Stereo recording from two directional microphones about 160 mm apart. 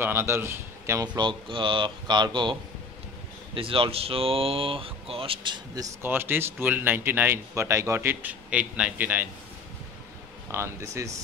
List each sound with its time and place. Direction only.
0.0 s speech: 15° right (ahead or behind)
3.5 s speech: 35° right (ahead or behind)
6.0 s speech: 15° right (ahead or behind)
10.5 s speech: 20° right (ahead or behind)